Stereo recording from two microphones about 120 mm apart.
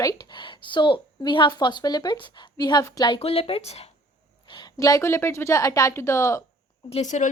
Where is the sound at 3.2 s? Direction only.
55° left (ahead or behind).